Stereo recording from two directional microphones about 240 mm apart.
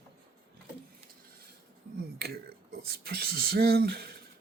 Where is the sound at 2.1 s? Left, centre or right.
Right.